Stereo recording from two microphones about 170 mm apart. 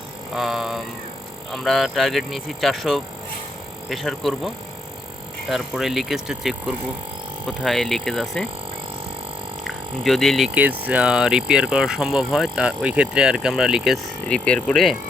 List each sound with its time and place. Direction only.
0.3 s speech: centre (ahead or behind)
10.0 s speech: centre (ahead or behind)